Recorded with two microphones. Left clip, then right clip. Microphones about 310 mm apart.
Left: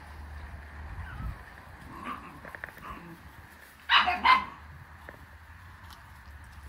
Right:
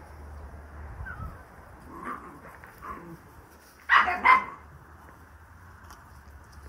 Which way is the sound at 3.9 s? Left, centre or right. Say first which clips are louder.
Right 2 dB; left.